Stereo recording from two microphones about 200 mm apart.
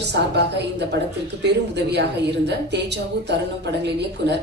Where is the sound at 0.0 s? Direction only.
60° right (ahead or behind).